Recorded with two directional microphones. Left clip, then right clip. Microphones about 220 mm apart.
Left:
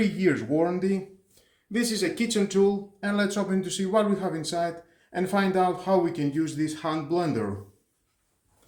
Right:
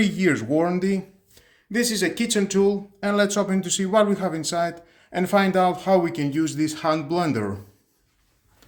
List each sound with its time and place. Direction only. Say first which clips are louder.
0.0 s speech: right 3 dB; 30° right (ahead or behind)